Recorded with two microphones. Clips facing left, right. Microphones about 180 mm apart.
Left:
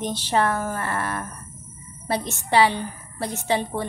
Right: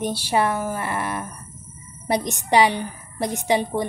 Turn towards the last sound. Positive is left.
turn(degrees=-15)  # may be behind; listen again after turning